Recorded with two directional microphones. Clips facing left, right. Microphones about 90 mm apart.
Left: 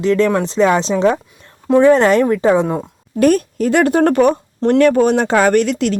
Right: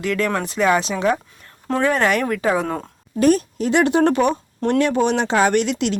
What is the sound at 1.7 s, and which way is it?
Speech, 20° left (ahead or behind).